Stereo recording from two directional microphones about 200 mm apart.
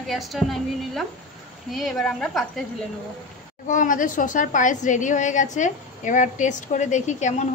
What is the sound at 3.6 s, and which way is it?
A woman's voice, 40° left (ahead or behind).